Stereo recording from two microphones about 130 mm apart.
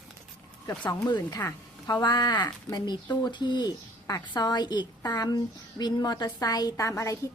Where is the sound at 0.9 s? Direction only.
30° left (ahead or behind).